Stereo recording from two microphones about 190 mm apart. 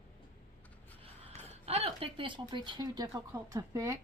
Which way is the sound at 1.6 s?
30° right (ahead or behind).